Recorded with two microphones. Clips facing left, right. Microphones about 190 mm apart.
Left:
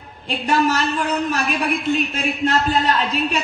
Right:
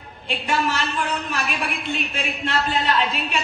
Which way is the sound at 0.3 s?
40° left (ahead or behind).